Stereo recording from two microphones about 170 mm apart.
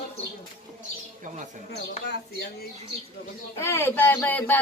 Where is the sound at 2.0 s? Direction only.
75° left (ahead or behind).